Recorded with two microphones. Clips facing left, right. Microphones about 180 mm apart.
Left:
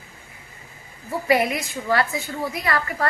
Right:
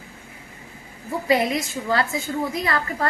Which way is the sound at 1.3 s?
25° right (ahead or behind).